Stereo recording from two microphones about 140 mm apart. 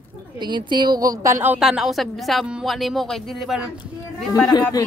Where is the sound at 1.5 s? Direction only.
5° right (ahead or behind).